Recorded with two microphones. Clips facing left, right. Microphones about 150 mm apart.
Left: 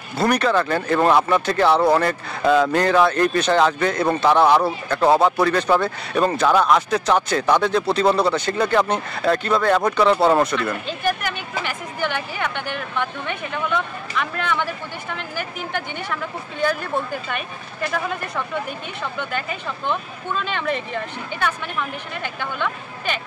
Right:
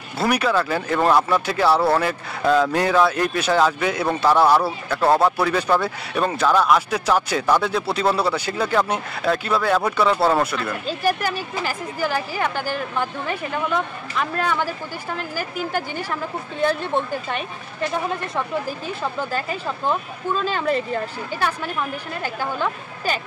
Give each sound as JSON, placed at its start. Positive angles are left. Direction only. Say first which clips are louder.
{"t": 0.2, "sound": "speech", "louder": "left 2 dB", "side_deg": -10}
{"t": 10.9, "sound": "speech", "louder": "right 2 dB", "side_deg": -35}
{"t": 16.6, "sound": "speech", "louder": "right 1 dB", "side_deg": -25}